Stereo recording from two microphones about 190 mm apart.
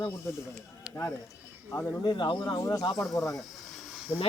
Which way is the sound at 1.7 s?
15° left (ahead or behind).